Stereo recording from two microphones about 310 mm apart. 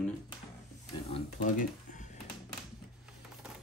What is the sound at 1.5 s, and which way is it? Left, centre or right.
Computer keyboard, left.